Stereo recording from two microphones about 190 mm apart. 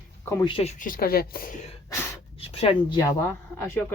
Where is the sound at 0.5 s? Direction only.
35° left (ahead or behind).